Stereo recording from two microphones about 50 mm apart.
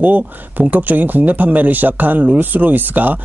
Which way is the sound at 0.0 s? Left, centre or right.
Right.